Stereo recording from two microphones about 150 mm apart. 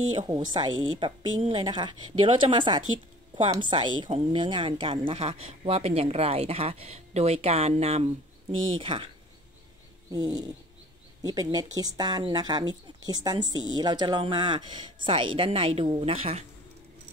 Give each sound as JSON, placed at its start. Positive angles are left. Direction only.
{"t": 0.3, "sound": "speech", "side_deg": -30}
{"t": 10.1, "sound": "speech", "side_deg": -25}